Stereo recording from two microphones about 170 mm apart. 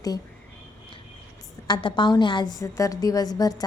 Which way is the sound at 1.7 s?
30° left (ahead or behind).